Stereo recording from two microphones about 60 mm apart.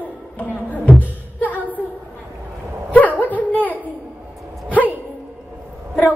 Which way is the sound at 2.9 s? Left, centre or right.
Left.